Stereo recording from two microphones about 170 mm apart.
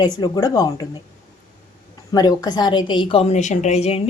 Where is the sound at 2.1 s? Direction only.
25° left (ahead or behind).